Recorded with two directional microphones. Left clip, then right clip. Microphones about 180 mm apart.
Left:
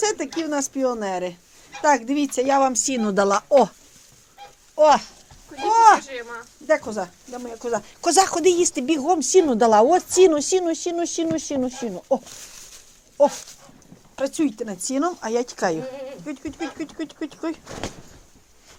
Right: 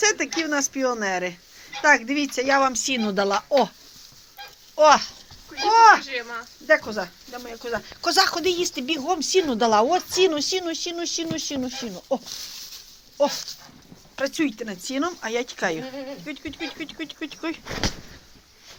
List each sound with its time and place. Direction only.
0.0 s speech: 20° left (ahead or behind); by 3.7 s 45° left (ahead or behind)
4.8 s speech: 25° left (ahead or behind)
5.6 s speech: 10° left (ahead or behind)
6.7 s speech: 25° left (ahead or behind)
7.6 s speech: 40° left (ahead or behind)
8.0 s speech: 75° left (ahead or behind); by 12.2 s 30° left (ahead or behind)
14.2 s speech: 35° left (ahead or behind)
17.7 s speech: 35° right (ahead or behind)